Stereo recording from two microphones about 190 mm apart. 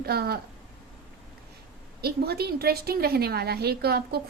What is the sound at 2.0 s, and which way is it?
A woman's voice, 55° right (ahead or behind).